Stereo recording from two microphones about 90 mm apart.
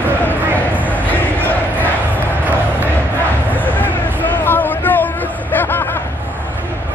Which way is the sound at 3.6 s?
20° left (ahead or behind).